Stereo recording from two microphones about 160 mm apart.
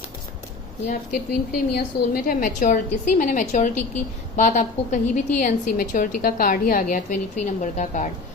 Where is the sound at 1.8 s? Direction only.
65° left (ahead or behind).